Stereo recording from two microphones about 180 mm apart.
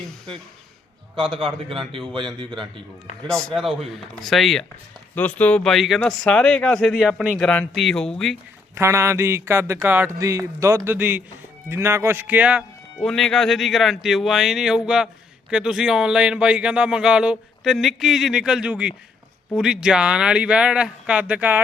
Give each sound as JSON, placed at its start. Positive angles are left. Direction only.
{"t": 1.1, "sound": "a man's voice", "side_deg": -30}
{"t": 3.2, "sound": "speech", "side_deg": 0}
{"t": 8.7, "sound": "speech", "side_deg": -15}